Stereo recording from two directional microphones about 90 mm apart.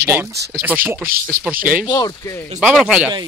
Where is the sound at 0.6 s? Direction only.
20° right (ahead or behind).